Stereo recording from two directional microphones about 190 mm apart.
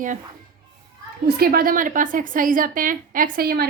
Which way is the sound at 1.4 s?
50° right (ahead or behind).